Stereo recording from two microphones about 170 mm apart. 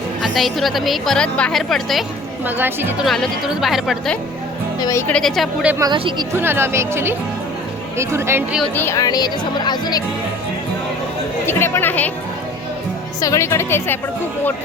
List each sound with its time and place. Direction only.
0.2 s a woman's voice: centre (ahead or behind)
2.4 s speech: 10° right (ahead or behind)
3.0 s a woman's voice: centre (ahead or behind)
4.8 s a woman's voice: 15° left (ahead or behind)
5.1 s a woman's voice: centre (ahead or behind)
5.8 s speech: 25° right (ahead or behind)
6.3 s speech: 15° right (ahead or behind)
8.7 s speech: 15° left (ahead or behind)
11.4 s a woman's voice: 15° left (ahead or behind)
13.2 s a woman's voice: 15° left (ahead or behind)